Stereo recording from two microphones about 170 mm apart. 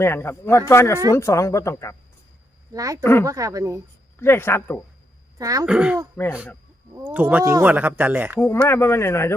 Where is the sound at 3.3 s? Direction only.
20° right (ahead or behind).